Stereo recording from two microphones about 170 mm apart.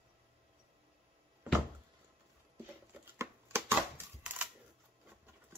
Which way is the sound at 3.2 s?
15° right (ahead or behind).